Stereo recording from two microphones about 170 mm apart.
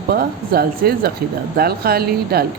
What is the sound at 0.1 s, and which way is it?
Speech, 65° right (ahead or behind).